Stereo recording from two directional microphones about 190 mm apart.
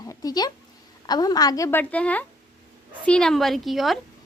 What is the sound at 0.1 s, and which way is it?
A woman's voice, 20° left (ahead or behind).